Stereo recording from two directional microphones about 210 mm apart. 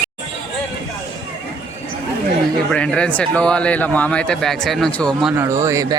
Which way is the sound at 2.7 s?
5° left (ahead or behind).